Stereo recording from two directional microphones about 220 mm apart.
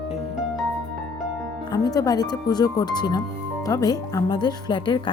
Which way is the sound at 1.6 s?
15° left (ahead or behind).